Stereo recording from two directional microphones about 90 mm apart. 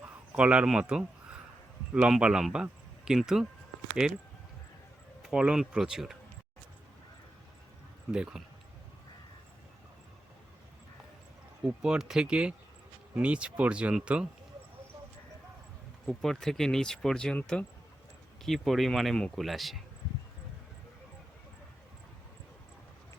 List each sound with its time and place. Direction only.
0.3 s speech: 10° right (ahead or behind)
5.2 s speech: 10° right (ahead or behind)
8.1 s speech: 10° right (ahead or behind)
11.6 s speech: 10° right (ahead or behind)
16.0 s speech: 5° left (ahead or behind)
18.4 s speech: centre (ahead or behind)